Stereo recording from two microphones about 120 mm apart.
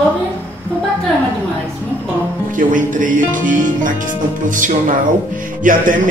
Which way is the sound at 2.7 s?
90° right.